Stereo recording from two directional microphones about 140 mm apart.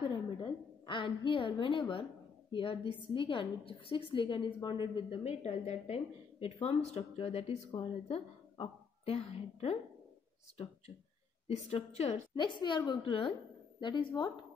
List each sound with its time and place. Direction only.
0.1 s a woman's voice: 35° left (ahead or behind)
11.4 s a woman's voice: 50° left (ahead or behind)
12.4 s a woman's voice: 35° left (ahead or behind)